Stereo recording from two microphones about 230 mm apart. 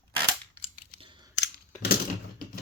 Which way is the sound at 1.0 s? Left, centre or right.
Right.